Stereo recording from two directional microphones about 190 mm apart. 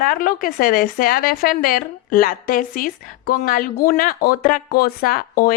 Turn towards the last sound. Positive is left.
turn(degrees=50)  # may be behind; listen again after turning